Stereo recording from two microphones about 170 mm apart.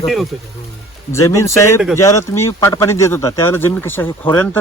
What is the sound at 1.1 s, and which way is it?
Speech, 15° left (ahead or behind).